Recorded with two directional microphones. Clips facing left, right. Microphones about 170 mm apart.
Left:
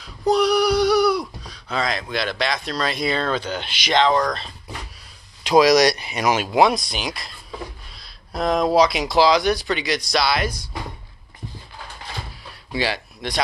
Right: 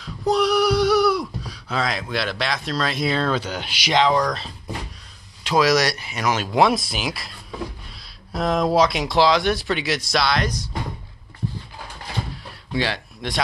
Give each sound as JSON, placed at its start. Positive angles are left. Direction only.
{"t": 0.0, "sound": "speech", "side_deg": 0}
{"t": 5.4, "sound": "speech", "side_deg": 15}
{"t": 6.6, "sound": "speech", "side_deg": -5}
{"t": 12.7, "sound": "speech", "side_deg": 5}